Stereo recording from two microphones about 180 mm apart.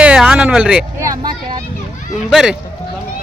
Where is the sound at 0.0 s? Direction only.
5° right (ahead or behind).